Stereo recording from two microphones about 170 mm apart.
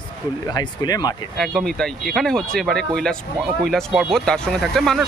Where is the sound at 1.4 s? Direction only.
Centre (ahead or behind).